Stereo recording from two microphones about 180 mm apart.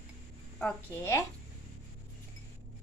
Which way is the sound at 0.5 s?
5° left (ahead or behind).